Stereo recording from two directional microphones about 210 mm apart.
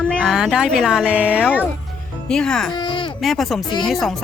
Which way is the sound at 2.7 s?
20° left (ahead or behind).